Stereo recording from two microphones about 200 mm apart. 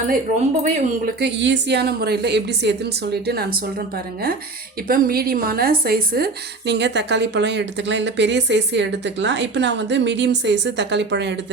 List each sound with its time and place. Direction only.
0.6 s speech: 45° right (ahead or behind)
1.4 s a woman's voice: 60° right (ahead or behind)